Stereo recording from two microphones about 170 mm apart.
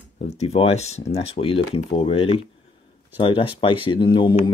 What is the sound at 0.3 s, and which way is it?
Speech, 40° left (ahead or behind).